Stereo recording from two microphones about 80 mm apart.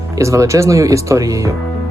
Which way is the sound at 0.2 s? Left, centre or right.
Right.